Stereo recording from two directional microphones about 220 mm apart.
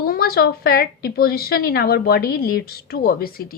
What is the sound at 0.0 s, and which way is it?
A woman's voice, 45° left (ahead or behind).